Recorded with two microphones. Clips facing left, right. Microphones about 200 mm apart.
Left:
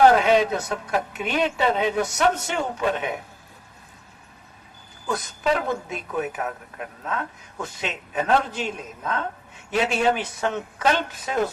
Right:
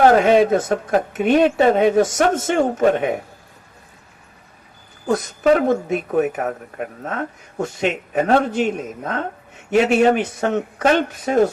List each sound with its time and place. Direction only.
0.1 s a woman's voice: 45° right (ahead or behind)
5.0 s a woman's voice: 45° right (ahead or behind)